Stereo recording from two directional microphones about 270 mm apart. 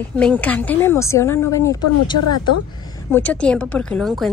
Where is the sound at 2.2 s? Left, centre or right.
Left.